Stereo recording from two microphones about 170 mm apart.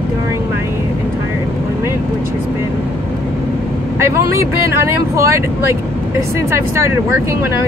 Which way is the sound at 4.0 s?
15° right (ahead or behind).